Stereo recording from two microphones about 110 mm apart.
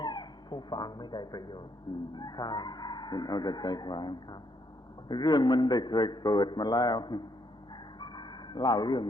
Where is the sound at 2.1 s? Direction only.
40° left (ahead or behind).